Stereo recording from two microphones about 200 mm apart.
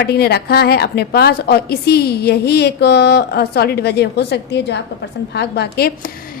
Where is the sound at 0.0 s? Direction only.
55° left (ahead or behind).